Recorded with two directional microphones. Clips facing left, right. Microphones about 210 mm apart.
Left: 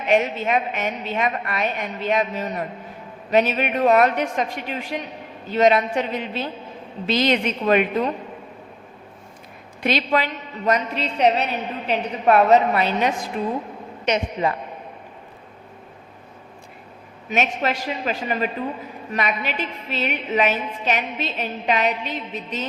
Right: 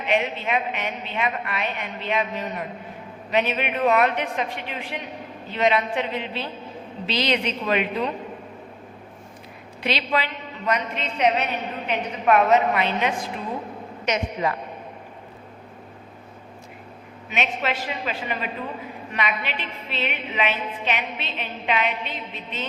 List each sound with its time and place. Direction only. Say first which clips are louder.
0.1 s a woman's voice: left 4 dB; 45° left (ahead or behind)
9.8 s a woman's voice: left 4 dB; 45° left (ahead or behind)
17.2 s a woman's voice: left 4 dB; 45° left (ahead or behind)